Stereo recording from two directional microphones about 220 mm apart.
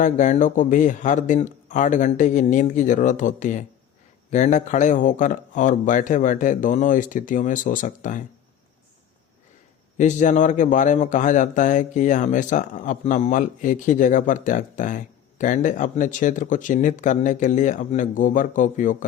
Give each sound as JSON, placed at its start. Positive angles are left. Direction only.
{"t": 0.0, "sound": "a man's voice", "side_deg": 35}
{"t": 10.0, "sound": "a man's voice", "side_deg": 35}